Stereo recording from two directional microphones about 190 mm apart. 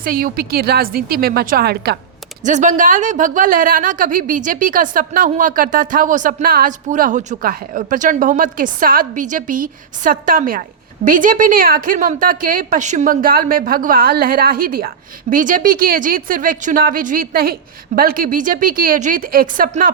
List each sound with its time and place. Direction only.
0.0 s a woman's voice: 50° right (ahead or behind)
2.4 s a woman's voice: 40° right (ahead or behind)